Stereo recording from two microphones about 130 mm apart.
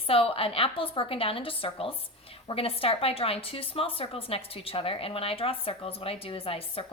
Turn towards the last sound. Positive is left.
turn(degrees=45)  # may be behind; listen again after turning